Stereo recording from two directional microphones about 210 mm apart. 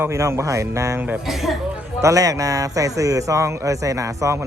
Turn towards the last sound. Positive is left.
turn(degrees=-15)  # may be behind; listen again after turning